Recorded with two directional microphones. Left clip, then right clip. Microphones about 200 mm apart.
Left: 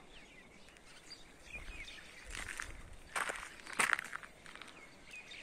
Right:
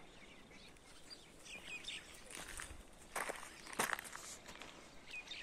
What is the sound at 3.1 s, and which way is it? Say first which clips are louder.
Walk: left 5 dB; centre (ahead or behind).